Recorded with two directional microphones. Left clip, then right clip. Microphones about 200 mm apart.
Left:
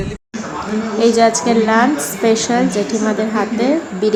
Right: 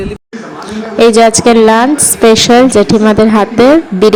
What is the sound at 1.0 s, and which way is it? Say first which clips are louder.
A woman's voice: right 8 dB; 40° right (ahead or behind).